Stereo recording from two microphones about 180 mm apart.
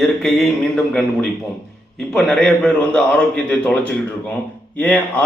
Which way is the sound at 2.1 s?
5° left (ahead or behind).